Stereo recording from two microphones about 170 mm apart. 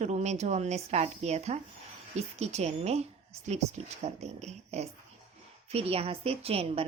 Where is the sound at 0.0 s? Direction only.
40° right (ahead or behind).